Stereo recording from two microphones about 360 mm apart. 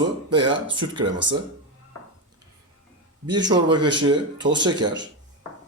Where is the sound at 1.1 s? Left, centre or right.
Right.